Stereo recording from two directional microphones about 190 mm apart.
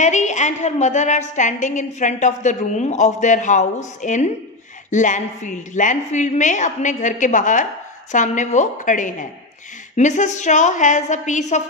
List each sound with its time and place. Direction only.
0.0 s a woman's voice: 40° left (ahead or behind)